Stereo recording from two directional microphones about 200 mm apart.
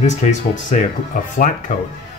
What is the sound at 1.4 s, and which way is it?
Speech, 40° left (ahead or behind).